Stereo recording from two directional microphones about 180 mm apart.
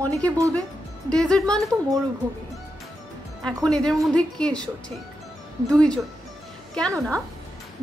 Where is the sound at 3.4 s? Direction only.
5° left (ahead or behind).